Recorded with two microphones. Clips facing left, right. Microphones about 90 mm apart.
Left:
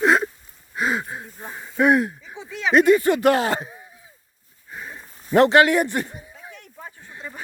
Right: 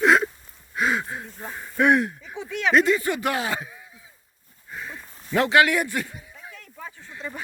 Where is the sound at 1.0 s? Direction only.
10° left (ahead or behind).